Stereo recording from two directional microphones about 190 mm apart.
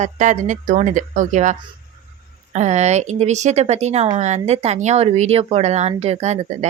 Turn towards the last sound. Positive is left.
turn(degrees=-35)  # may be behind; listen again after turning